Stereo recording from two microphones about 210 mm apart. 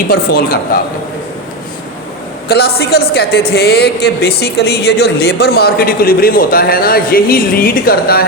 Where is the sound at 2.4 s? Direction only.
50° left (ahead or behind).